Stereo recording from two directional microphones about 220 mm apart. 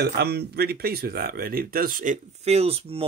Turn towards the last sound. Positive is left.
turn(degrees=-25)  # may be behind; listen again after turning